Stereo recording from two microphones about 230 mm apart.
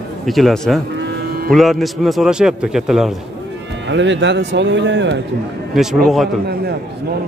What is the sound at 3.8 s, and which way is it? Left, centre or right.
Speech, right.